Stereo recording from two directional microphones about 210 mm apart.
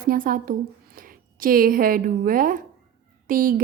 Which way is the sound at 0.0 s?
40° right (ahead or behind).